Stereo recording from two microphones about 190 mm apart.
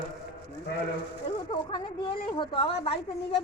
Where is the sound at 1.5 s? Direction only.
25° left (ahead or behind).